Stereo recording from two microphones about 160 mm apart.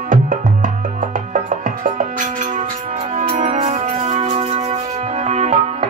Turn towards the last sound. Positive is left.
turn(degrees=-45)  # may be behind; listen again after turning